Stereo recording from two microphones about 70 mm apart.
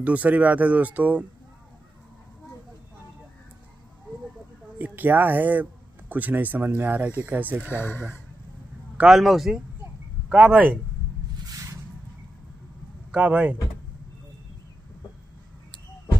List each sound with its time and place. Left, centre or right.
0.0 s speech: right
4.7 s speech: right
7.6 s speech: left
8.9 s speech: centre
10.3 s speech: centre
11.4 s a sound: right
13.1 s speech: centre